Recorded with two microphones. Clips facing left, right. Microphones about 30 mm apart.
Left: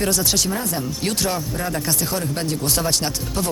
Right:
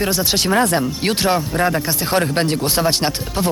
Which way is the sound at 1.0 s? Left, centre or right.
Right.